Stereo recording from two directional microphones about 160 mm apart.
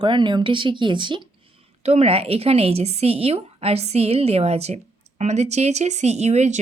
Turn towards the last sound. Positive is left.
turn(degrees=-45)  # may be behind; listen again after turning